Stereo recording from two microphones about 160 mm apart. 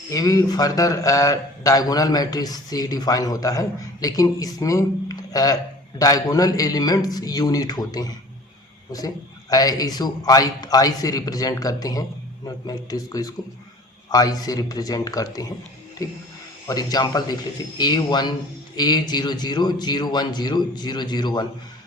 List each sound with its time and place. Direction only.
0.1 s speech: 20° left (ahead or behind)